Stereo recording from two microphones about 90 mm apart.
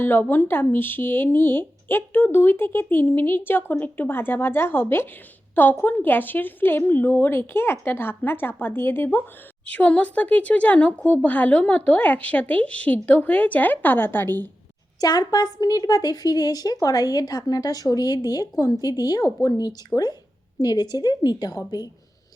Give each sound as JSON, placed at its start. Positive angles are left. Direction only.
{"t": 0.0, "sound": "speech", "side_deg": 25}
{"t": 15.0, "sound": "a woman's voice", "side_deg": 45}
{"t": 19.9, "sound": "speech", "side_deg": 0}
{"t": 20.6, "sound": "a woman's voice", "side_deg": 50}